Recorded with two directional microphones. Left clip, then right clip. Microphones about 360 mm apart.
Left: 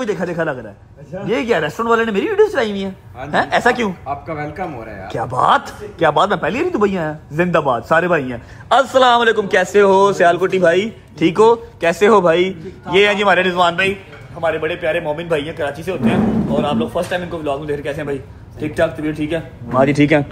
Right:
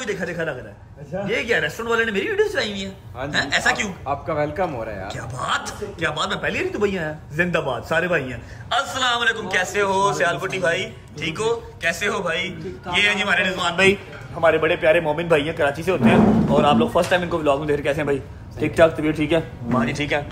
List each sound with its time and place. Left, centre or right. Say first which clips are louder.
0.0 s a man's voice: left 6 dB; centre
19.9 s a man's voice: left 9 dB; centre